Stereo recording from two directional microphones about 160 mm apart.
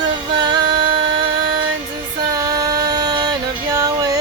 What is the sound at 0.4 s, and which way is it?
Music, 30° right (ahead or behind).